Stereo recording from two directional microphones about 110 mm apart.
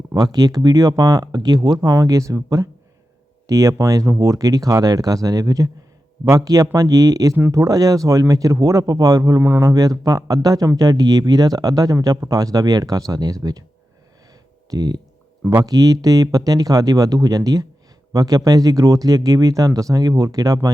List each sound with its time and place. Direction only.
0.2 s speech: 35° right (ahead or behind)
14.7 s speech: 35° right (ahead or behind)